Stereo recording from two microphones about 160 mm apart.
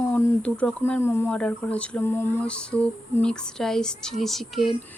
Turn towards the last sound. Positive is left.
turn(degrees=0)  # may be behind; listen again after turning